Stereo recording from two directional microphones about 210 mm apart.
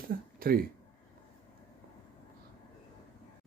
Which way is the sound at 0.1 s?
45° right (ahead or behind).